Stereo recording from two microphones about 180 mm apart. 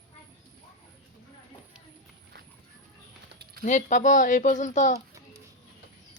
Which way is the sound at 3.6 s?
45° left (ahead or behind).